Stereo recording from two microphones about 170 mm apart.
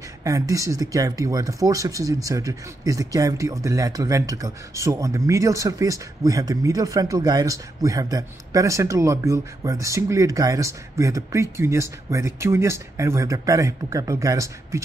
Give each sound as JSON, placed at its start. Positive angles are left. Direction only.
{"t": 0.2, "sound": "speech", "side_deg": -20}